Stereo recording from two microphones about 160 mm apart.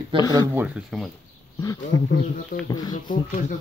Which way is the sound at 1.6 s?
20° left (ahead or behind).